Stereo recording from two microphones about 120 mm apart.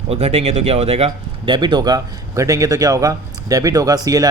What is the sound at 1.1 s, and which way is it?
Speech, 40° right (ahead or behind).